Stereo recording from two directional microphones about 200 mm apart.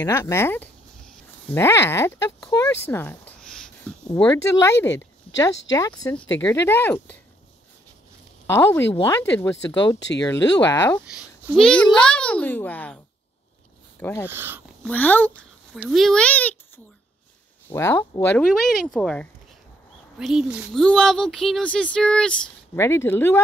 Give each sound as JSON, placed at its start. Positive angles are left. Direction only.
{"t": 0.0, "sound": "speech", "side_deg": 15}
{"t": 2.9, "sound": "a sound", "side_deg": 10}
{"t": 4.2, "sound": "speech", "side_deg": 10}
{"t": 8.5, "sound": "speech", "side_deg": 10}
{"t": 11.1, "sound": "speech", "side_deg": 0}
{"t": 14.2, "sound": "speech", "side_deg": -10}
{"t": 14.9, "sound": "speech", "side_deg": 10}
{"t": 18.4, "sound": "speech", "side_deg": 0}